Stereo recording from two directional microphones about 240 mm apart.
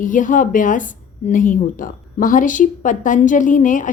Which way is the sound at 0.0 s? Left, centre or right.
Left.